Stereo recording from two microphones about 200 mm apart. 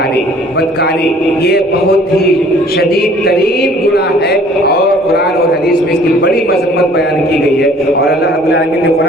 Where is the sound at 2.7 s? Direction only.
50° left (ahead or behind).